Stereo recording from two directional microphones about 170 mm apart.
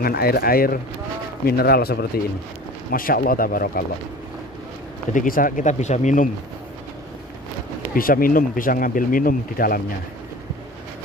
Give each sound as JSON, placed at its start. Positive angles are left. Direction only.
{"t": 0.0, "sound": "speech", "side_deg": 65}
{"t": 5.1, "sound": "speech", "side_deg": 55}
{"t": 7.9, "sound": "speech", "side_deg": 55}